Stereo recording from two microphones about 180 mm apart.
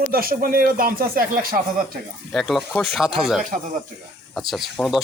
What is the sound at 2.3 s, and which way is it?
Speech, centre (ahead or behind).